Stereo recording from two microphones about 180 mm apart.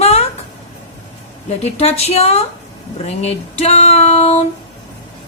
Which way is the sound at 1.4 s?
35° left (ahead or behind).